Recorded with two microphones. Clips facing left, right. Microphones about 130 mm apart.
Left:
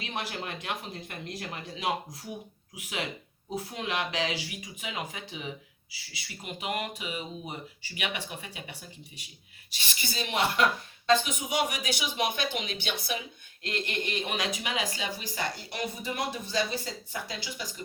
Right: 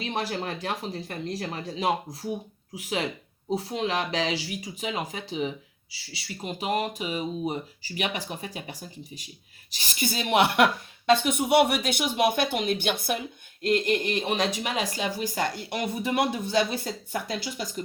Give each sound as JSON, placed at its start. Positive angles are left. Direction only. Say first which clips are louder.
{"t": 0.0, "sound": "a woman's voice", "louder": "right 6 dB", "side_deg": -35}